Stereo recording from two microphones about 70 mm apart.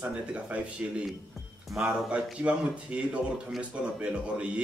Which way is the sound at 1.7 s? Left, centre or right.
Centre.